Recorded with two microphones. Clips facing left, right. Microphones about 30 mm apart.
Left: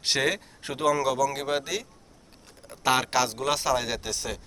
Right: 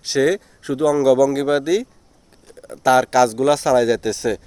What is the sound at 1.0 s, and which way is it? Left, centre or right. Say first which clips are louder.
Speech: right 11 dB; centre.